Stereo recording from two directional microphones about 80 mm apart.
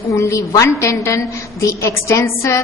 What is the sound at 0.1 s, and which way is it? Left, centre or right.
A man's voice, left.